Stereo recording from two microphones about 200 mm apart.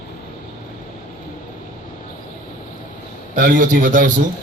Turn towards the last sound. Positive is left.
turn(degrees=-40)  # may be behind; listen again after turning